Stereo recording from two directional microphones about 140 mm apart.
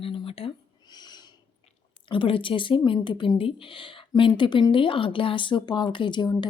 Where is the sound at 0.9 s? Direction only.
30° left (ahead or behind).